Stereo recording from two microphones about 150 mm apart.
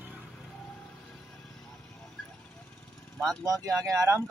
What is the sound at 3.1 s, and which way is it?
Speech, 5° left (ahead or behind).